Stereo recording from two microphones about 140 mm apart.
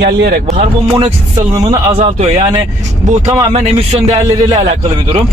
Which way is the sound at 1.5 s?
30° right (ahead or behind).